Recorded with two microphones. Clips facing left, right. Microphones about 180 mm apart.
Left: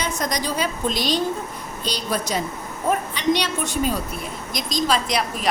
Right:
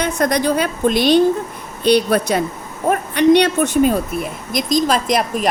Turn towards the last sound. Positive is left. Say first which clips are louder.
# right 6 dB
turn(degrees=-50)  # may be behind; listen again after turning